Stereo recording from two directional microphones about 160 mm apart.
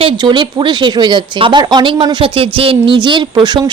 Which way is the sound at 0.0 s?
30° right (ahead or behind).